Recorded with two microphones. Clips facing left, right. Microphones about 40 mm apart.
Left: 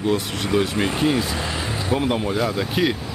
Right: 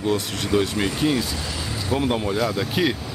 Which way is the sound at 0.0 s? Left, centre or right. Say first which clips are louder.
Left 1 dB; centre.